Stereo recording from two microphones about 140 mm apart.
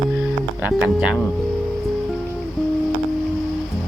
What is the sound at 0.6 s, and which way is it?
Speech, 10° right (ahead or behind).